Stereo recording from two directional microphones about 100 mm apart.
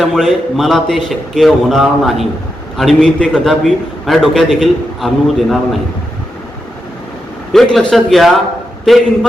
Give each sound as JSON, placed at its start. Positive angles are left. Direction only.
{"t": 0.0, "sound": "a man's voice", "side_deg": 5}
{"t": 7.5, "sound": "a man's voice", "side_deg": 5}